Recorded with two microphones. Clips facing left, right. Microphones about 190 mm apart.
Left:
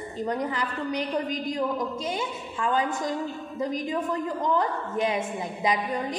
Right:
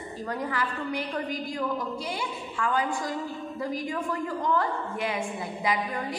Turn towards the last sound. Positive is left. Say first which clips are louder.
# left 2 dB
turn(degrees=20)  # may be behind; listen again after turning